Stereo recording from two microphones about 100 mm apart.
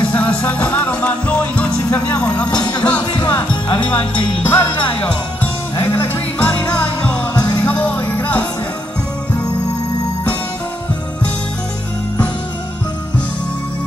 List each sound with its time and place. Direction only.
0.1 s music: 15° left (ahead or behind)